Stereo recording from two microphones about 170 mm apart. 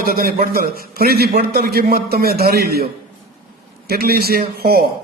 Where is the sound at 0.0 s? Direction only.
60° right (ahead or behind).